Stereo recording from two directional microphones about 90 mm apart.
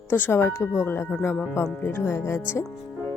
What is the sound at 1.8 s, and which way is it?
Speech, 25° left (ahead or behind).